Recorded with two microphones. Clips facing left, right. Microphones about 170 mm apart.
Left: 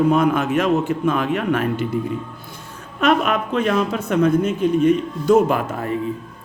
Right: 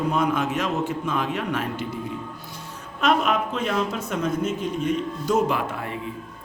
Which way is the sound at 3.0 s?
60° left (ahead or behind).